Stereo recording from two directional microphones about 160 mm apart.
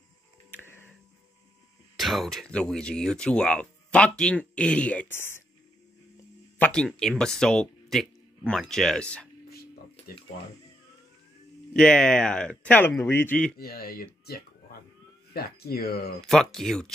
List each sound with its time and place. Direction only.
0.5 s music: 15° left (ahead or behind)
2.0 s speech: centre (ahead or behind)
6.6 s speech: 5° left (ahead or behind)
9.5 s a sound: 75° left (ahead or behind)
11.7 s speech: 5° left (ahead or behind)
13.6 s speech: 70° left (ahead or behind)
16.2 s speech: centre (ahead or behind)